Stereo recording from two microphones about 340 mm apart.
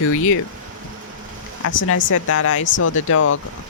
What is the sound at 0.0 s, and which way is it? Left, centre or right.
Speech, left.